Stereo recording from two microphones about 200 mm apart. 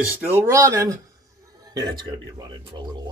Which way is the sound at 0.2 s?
15° right (ahead or behind).